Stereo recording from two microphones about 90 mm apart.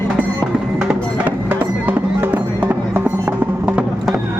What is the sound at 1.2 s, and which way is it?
Music, 20° right (ahead or behind).